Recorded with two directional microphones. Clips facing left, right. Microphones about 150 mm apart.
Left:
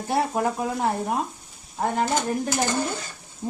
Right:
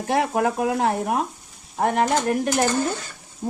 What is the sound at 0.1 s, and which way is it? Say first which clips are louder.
Speech: right 2 dB; 80° right.